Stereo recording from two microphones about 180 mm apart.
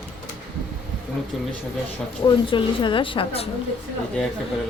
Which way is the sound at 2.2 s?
25° left (ahead or behind).